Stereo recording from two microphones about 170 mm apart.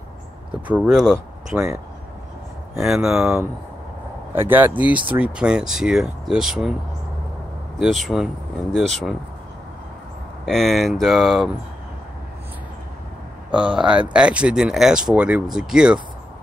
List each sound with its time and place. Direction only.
0.6 s speech: 10° right (ahead or behind)
2.8 s speech: 5° right (ahead or behind)
7.8 s speech: centre (ahead or behind)
10.4 s speech: centre (ahead or behind)
13.7 s speech: 5° right (ahead or behind)